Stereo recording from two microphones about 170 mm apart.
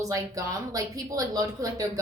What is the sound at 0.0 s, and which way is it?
Speech, 20° right (ahead or behind).